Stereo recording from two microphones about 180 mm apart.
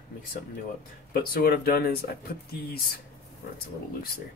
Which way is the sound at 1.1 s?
55° left (ahead or behind).